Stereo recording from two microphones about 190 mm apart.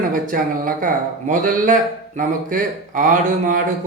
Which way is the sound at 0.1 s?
45° right (ahead or behind).